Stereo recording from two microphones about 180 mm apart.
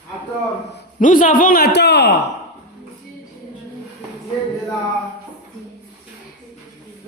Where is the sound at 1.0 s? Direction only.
45° left (ahead or behind); by 2.1 s 70° left (ahead or behind).